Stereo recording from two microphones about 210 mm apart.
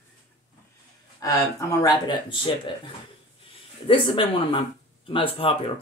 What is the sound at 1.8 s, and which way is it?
Speech, 20° left (ahead or behind).